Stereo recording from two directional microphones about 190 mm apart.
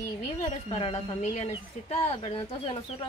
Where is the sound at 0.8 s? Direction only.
30° left (ahead or behind).